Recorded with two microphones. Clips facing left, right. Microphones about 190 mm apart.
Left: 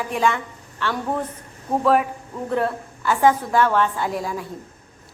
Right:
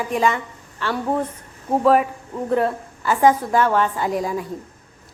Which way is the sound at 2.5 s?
5° right (ahead or behind).